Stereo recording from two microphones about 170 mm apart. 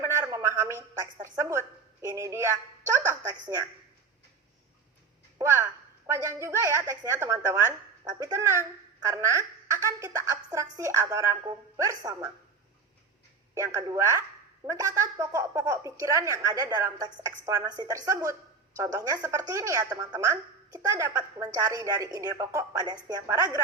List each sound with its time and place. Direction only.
0.0 s a sound: 15° right (ahead or behind)
1.2 s speech: 15° right (ahead or behind)
5.4 s a woman's voice: 15° right (ahead or behind)
13.5 s a woman's voice: 15° right (ahead or behind)